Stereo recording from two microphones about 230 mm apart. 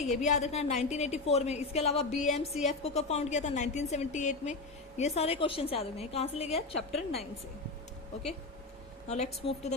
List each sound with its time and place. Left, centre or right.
0.0 s a woman's voice: left
9.0 s a woman's voice: left